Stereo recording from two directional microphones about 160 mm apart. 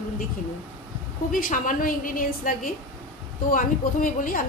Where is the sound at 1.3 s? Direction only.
60° left (ahead or behind).